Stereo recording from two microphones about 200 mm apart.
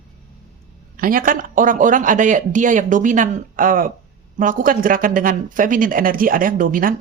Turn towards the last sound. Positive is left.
turn(degrees=-45)  # may be behind; listen again after turning